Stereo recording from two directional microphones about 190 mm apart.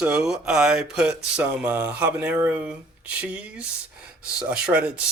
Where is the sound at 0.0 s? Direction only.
5° right (ahead or behind).